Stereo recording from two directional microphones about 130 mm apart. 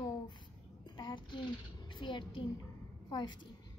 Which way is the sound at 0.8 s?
35° left (ahead or behind).